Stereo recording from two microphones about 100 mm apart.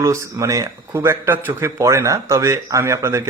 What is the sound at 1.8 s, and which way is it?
Speech, 30° right (ahead or behind).